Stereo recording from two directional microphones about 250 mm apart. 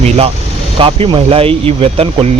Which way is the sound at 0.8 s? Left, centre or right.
Right.